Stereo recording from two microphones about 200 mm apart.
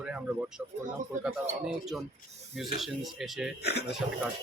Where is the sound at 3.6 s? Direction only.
55° left (ahead or behind).